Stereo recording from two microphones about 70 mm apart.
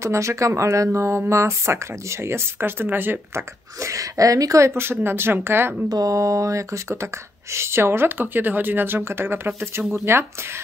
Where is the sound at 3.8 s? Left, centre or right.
Right.